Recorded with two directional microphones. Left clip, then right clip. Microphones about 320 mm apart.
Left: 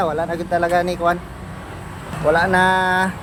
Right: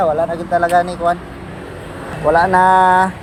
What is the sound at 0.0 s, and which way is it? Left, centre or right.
Speech, centre.